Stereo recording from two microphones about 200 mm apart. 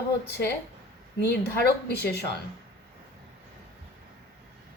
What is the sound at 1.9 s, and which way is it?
Speech, 55° left (ahead or behind).